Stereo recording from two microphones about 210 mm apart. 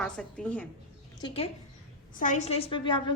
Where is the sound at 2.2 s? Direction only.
35° left (ahead or behind).